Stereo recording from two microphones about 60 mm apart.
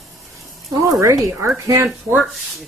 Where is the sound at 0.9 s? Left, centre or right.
Right.